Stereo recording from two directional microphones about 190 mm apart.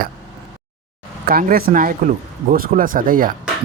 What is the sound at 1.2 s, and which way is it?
Speech, 50° right (ahead or behind).